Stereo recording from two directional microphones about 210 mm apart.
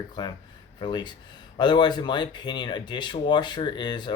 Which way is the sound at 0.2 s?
20° left (ahead or behind).